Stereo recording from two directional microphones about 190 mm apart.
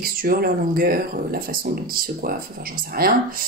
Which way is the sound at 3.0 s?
50° right (ahead or behind).